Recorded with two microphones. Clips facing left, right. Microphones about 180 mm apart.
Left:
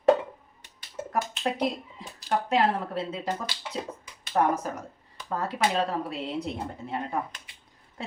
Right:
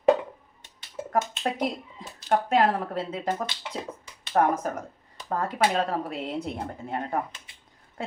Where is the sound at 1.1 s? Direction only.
25° right (ahead or behind).